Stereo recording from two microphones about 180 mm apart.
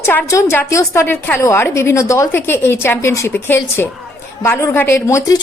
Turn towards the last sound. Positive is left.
turn(degrees=20)  # may be behind; listen again after turning